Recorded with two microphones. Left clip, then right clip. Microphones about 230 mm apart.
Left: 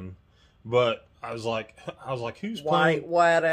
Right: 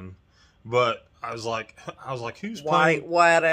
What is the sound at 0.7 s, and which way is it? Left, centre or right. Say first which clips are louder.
Speech: right 1 dB; centre.